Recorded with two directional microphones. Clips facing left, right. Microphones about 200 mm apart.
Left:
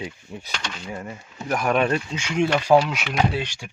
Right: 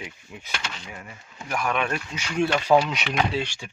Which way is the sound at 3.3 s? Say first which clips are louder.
Even; 15° left (ahead or behind).